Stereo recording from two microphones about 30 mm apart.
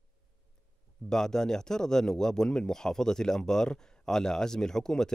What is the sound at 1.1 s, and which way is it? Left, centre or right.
Speech, centre.